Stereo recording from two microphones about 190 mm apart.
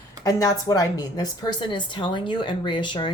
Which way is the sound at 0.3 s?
20° left (ahead or behind).